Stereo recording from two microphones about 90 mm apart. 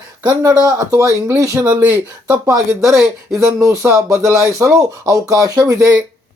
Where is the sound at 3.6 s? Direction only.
40° right (ahead or behind).